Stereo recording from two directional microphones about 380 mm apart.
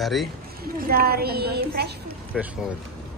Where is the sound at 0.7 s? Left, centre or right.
Right.